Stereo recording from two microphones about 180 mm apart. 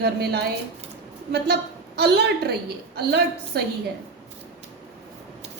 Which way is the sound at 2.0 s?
65° right (ahead or behind).